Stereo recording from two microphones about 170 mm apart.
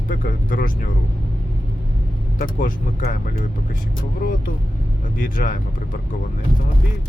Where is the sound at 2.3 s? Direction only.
50° left (ahead or behind).